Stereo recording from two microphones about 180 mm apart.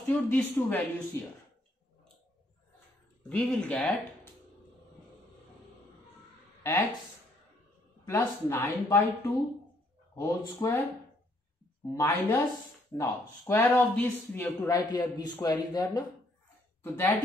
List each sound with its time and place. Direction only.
0.1 s speech: 10° left (ahead or behind)
3.3 s speech: 10° left (ahead or behind)
6.6 s speech: 10° left (ahead or behind)
8.0 s speech: 15° left (ahead or behind)
11.9 s speech: 15° left (ahead or behind)